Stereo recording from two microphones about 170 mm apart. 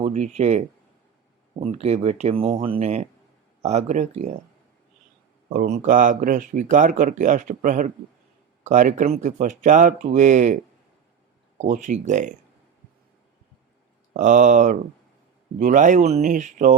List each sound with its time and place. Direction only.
0.0 s speech: 40° right (ahead or behind)
5.6 s speech: 45° right (ahead or behind)
14.1 s speech: 45° right (ahead or behind)